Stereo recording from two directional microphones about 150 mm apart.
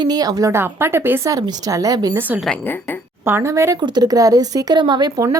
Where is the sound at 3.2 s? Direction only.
20° right (ahead or behind).